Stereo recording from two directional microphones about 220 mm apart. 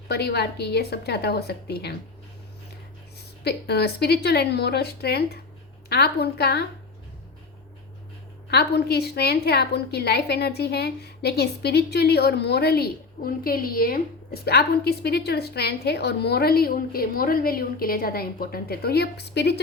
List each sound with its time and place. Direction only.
0.1 s a woman's voice: 50° left (ahead or behind)
3.2 s a woman's voice: 45° left (ahead or behind)
8.4 s a woman's voice: 50° left (ahead or behind)